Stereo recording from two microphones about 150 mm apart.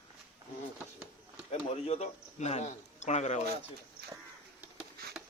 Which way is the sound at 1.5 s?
40° left (ahead or behind).